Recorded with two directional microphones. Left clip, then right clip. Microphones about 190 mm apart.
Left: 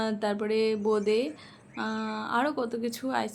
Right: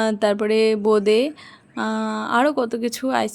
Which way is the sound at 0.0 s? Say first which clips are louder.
Right 10 dB; 45° right (ahead or behind).